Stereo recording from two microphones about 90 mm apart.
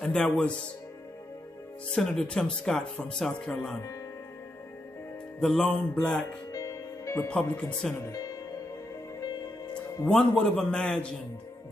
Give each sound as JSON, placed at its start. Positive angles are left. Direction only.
{"t": 0.0, "sound": "speech", "side_deg": 15}
{"t": 2.0, "sound": "speech", "side_deg": 5}
{"t": 5.4, "sound": "speech", "side_deg": 5}
{"t": 6.5, "sound": "music", "side_deg": 35}
{"t": 7.2, "sound": "speech", "side_deg": 10}
{"t": 8.1, "sound": "music", "side_deg": 40}
{"t": 10.0, "sound": "speech", "side_deg": 10}